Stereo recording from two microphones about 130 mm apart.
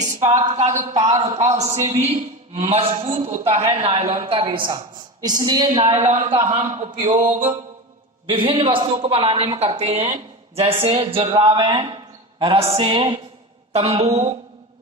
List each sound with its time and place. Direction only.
0.3 s a man's voice: 60° right (ahead or behind)
0.7 s a woman's voice: 30° right (ahead or behind)
1.2 s a man's voice: 60° right (ahead or behind)
4.4 s a woman's voice: 40° right (ahead or behind)
6.1 s a woman's voice: 50° right (ahead or behind)
6.7 s a woman's voice: 35° right (ahead or behind)
8.3 s a woman's voice: 45° right (ahead or behind)
13.7 s a woman's voice: 55° right (ahead or behind)